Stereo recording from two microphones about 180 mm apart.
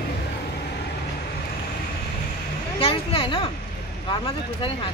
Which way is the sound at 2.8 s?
30° left (ahead or behind).